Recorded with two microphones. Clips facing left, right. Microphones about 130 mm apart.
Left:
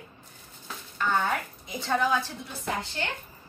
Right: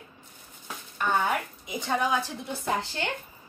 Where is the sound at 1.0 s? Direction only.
15° right (ahead or behind).